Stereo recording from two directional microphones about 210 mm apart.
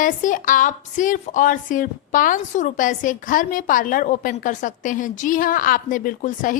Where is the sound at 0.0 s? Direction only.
40° left (ahead or behind).